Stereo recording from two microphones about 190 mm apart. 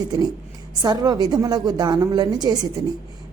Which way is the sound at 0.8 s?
20° right (ahead or behind).